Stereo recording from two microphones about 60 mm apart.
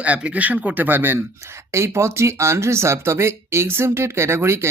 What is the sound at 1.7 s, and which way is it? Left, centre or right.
Speech, right.